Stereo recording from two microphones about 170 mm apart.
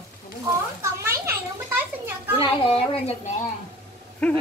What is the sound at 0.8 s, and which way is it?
Children playing, 15° right (ahead or behind).